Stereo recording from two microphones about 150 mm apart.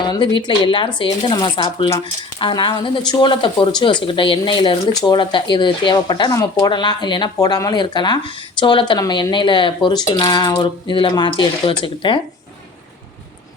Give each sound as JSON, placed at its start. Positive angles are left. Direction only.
{"t": 0.0, "sound": "speech", "side_deg": 30}